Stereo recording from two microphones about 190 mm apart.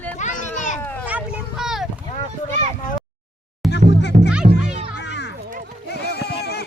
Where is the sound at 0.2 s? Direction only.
40° left (ahead or behind).